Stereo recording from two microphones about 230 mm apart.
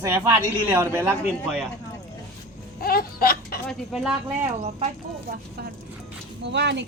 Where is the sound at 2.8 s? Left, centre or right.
Left.